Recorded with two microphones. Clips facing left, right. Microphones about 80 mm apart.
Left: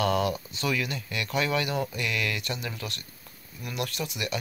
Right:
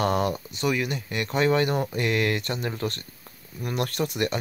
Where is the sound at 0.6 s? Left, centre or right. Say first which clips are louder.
Right 7 dB; right.